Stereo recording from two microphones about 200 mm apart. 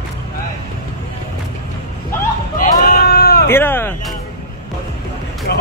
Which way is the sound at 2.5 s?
50° left (ahead or behind).